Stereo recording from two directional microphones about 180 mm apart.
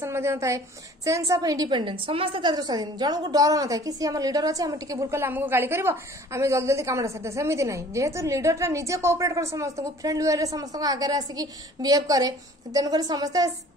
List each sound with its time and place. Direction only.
0.0 s a woman's voice: 15° right (ahead or behind)